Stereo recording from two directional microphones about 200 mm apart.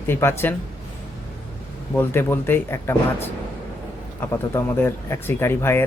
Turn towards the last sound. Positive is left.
turn(degrees=10)  # may be behind; listen again after turning